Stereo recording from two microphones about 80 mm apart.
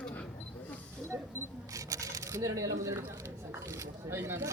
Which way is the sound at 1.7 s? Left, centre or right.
Right.